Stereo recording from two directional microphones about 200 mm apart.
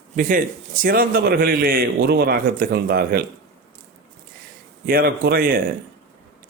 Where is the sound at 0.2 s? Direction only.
45° right (ahead or behind).